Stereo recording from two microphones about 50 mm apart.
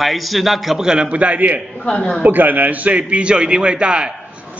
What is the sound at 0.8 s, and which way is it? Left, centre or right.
Speech, right.